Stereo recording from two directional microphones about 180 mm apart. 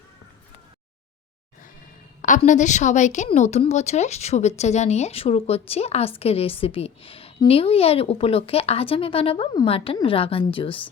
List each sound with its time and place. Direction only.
2.4 s speech: 40° left (ahead or behind)